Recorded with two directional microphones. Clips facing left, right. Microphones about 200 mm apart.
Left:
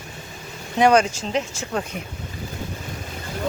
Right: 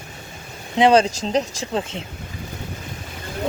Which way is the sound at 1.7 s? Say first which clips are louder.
Even; 25° right (ahead or behind).